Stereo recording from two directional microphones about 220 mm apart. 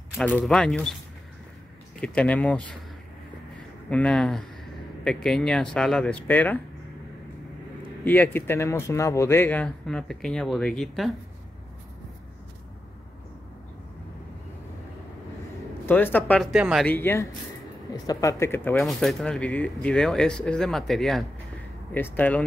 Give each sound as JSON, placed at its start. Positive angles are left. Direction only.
{"t": 0.5, "sound": "speech", "side_deg": 5}
{"t": 2.0, "sound": "speech", "side_deg": 5}
{"t": 3.9, "sound": "speech", "side_deg": 5}
{"t": 8.0, "sound": "speech", "side_deg": 10}
{"t": 15.8, "sound": "speech", "side_deg": 10}
{"t": 16.5, "sound": "speech", "side_deg": -5}
{"t": 16.8, "sound": "speech", "side_deg": 10}